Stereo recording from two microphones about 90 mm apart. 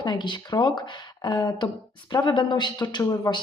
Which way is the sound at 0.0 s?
55° left (ahead or behind).